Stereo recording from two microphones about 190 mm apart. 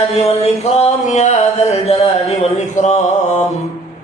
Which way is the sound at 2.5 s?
40° left (ahead or behind).